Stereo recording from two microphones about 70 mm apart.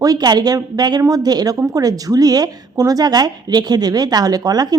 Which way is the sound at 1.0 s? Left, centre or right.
Right.